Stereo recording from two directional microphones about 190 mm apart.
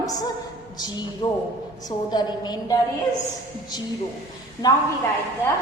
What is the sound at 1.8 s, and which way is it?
Speech, 20° left (ahead or behind).